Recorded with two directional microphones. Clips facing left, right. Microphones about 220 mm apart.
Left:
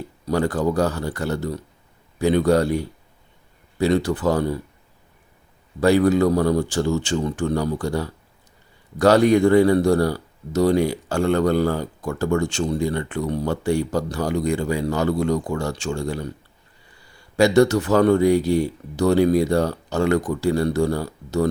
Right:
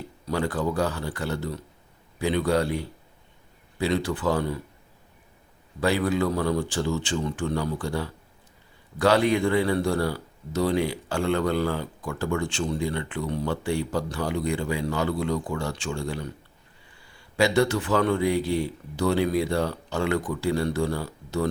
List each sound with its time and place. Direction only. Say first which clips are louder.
0.3 s speech: left 5 dB; 45° left (ahead or behind)
5.8 s speech: left 7 dB; 45° left (ahead or behind)
17.3 s speech: left 6 dB; 45° left (ahead or behind)